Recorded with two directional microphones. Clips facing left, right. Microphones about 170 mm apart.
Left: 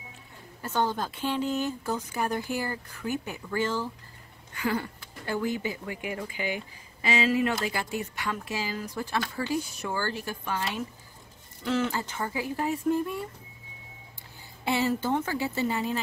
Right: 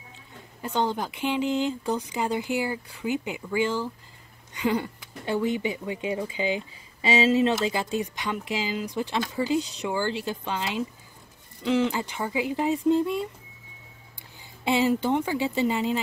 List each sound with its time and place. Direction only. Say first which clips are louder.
0.6 s speech: right 2 dB; 15° right (ahead or behind)
14.6 s speech: right 4 dB; 15° right (ahead or behind)